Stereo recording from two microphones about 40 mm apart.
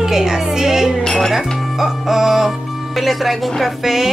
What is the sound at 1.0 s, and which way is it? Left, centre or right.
Music, centre.